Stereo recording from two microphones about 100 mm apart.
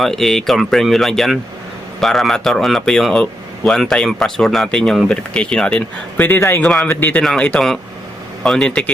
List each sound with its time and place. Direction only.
0.0 s speech: 5° left (ahead or behind); by 6.6 s 20° left (ahead or behind)
6.6 s speech: 5° left (ahead or behind)
6.9 s speech: 20° left (ahead or behind)
7.2 s a man's voice: 10° left (ahead or behind)